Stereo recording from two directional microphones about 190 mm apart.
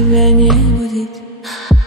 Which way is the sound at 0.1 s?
Centre (ahead or behind).